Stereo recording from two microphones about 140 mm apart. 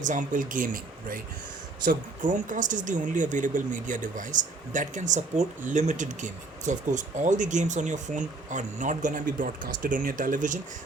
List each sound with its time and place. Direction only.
0.0 s speech: 65° right (ahead or behind)